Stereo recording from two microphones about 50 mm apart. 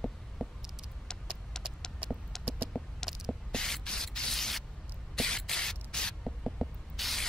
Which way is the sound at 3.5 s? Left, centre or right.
Centre.